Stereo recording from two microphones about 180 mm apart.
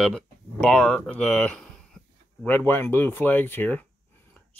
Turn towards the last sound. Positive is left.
turn(degrees=10)  # may be behind; listen again after turning